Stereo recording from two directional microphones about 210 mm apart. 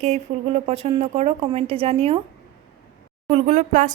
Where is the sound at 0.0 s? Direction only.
30° right (ahead or behind).